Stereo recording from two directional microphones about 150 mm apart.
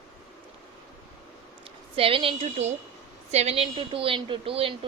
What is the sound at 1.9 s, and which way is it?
Speech, 40° right (ahead or behind).